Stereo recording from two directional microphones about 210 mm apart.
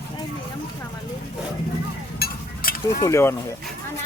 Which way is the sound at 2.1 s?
45° left (ahead or behind).